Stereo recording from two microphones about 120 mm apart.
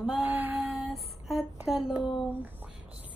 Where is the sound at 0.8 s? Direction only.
Centre (ahead or behind).